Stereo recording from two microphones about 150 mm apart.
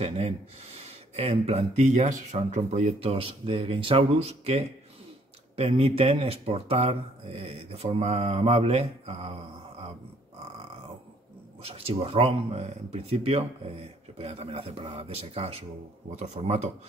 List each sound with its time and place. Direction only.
0.0 s speech: 45° right (ahead or behind)
11.6 s speech: 40° right (ahead or behind)